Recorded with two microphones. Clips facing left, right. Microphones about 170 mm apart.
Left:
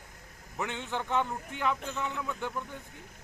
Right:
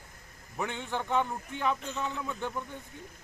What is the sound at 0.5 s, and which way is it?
Speech, 15° right (ahead or behind).